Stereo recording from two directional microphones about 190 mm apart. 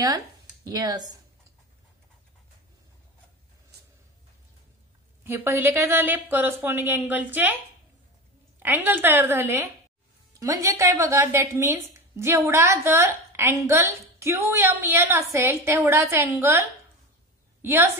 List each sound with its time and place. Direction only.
0.7 s speech: 20° right (ahead or behind)
3.7 s a sound: 55° right (ahead or behind)
5.2 s a woman's voice: 10° right (ahead or behind)
8.6 s a woman's voice: 10° right (ahead or behind)